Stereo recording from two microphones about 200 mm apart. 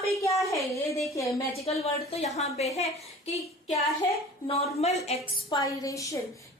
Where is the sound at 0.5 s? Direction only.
15° left (ahead or behind).